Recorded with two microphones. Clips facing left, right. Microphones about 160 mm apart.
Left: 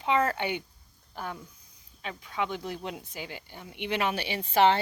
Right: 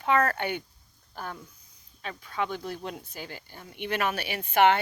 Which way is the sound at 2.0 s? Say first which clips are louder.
Right 1 dB; 20° left (ahead or behind).